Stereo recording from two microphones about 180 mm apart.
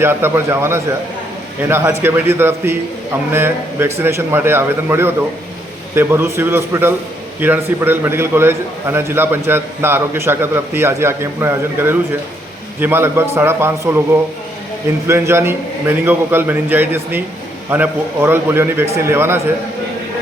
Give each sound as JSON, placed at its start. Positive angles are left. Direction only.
{"t": 0.0, "sound": "a man's voice", "side_deg": -15}
{"t": 15.0, "sound": "a man's voice", "side_deg": -15}